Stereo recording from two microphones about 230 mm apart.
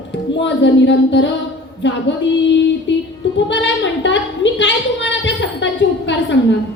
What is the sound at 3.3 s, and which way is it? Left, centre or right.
A woman's voice, left.